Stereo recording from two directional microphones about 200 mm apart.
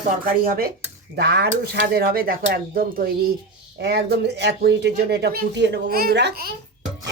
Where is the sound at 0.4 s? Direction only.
45° right (ahead or behind).